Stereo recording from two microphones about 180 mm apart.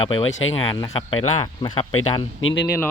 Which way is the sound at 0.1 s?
30° left (ahead or behind).